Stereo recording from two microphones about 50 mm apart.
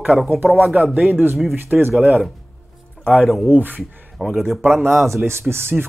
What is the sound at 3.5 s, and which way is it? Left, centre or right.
Speech, right.